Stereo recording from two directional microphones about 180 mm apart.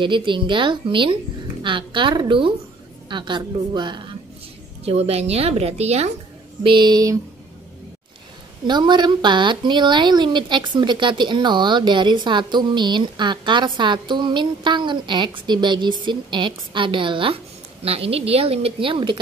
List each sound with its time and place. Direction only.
0.0 s a woman's voice: 25° right (ahead or behind)
6.6 s a woman's voice: 25° right (ahead or behind)
8.6 s a woman's voice: 25° right (ahead or behind)